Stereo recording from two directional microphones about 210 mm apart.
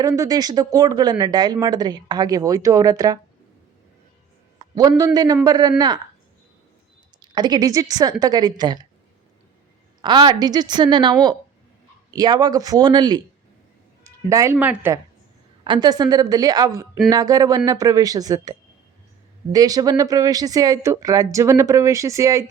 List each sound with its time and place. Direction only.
0.0 s speech: 15° right (ahead or behind)
4.5 s a man's voice: 20° right (ahead or behind)
7.2 s a woman's voice: 20° right (ahead or behind)
10.0 s a man's voice: 20° right (ahead or behind)
15.6 s a man's voice: 20° right (ahead or behind)
19.5 s speech: 15° right (ahead or behind)